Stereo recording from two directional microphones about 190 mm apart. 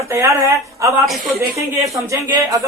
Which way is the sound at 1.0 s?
Centre (ahead or behind).